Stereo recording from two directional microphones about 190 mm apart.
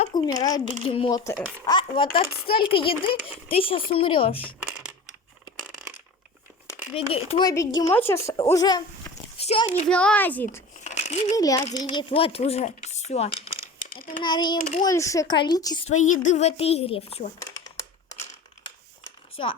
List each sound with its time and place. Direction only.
0.1 s speech: 20° left (ahead or behind)
1.2 s speech: 15° left (ahead or behind)
6.9 s speech: 30° left (ahead or behind)
9.4 s a child's voice: 30° left (ahead or behind)
9.8 s speech: 5° left (ahead or behind)
10.8 s a sound: 35° left (ahead or behind)
11.3 s speech: 20° left (ahead or behind); by 14.2 s 45° left (ahead or behind)
14.2 s speech: 25° left (ahead or behind)
14.6 s a woman's voice: 40° left (ahead or behind)
14.8 s speech: 15° left (ahead or behind)
15.9 s a woman's voice: 40° left (ahead or behind)
17.4 s a sound: 15° left (ahead or behind)
19.4 s speech: 30° left (ahead or behind)